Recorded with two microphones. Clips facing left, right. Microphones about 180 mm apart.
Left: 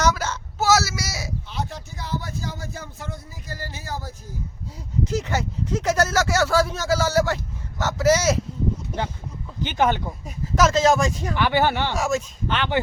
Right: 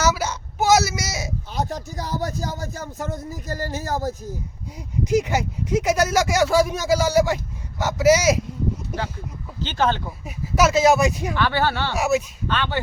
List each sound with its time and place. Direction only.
0.0 s a sound: 10° right (ahead or behind)
1.5 s speech: 40° right (ahead or behind)
5.0 s speech: 10° right (ahead or behind)
9.6 s speech: 15° left (ahead or behind)
10.2 s speech: 10° right (ahead or behind)
11.3 s speech: 15° left (ahead or behind)
11.9 s speech: 10° right (ahead or behind)
12.5 s speech: 15° left (ahead or behind)